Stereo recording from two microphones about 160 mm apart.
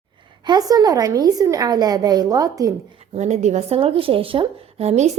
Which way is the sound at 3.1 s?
45° right (ahead or behind).